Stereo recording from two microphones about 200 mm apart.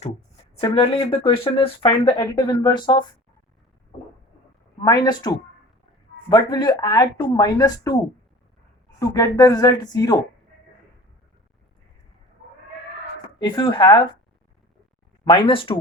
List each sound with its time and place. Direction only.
0.5 s speech: 25° left (ahead or behind)
4.8 s speech: 20° left (ahead or behind)
9.0 s speech: 15° left (ahead or behind)
13.4 s speech: 25° left (ahead or behind)
15.2 s speech: 25° left (ahead or behind)